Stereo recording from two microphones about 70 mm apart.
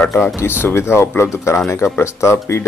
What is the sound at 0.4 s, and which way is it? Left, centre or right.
Speech, left.